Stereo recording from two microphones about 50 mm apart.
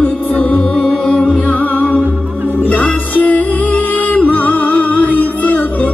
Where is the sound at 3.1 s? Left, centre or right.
Left.